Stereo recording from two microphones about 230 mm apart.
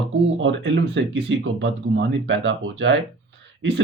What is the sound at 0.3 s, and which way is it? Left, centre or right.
Speech, right.